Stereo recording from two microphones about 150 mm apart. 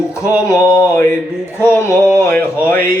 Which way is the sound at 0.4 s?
20° left (ahead or behind).